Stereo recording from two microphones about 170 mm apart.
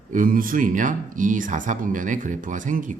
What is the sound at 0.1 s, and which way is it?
Speech, 55° right (ahead or behind).